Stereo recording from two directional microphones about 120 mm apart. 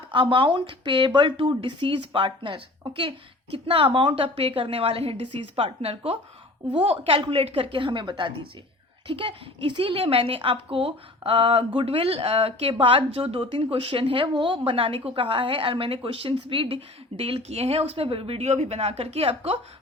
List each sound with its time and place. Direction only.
0.1 s a woman's voice: 45° right (ahead or behind)